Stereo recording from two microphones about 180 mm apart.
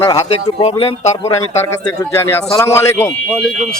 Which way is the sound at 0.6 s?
35° left (ahead or behind).